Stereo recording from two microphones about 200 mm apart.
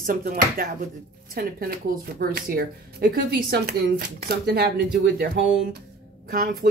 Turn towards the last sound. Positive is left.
turn(degrees=-45)  # may be behind; listen again after turning